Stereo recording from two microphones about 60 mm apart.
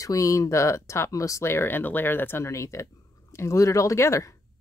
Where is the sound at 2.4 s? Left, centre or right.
Left.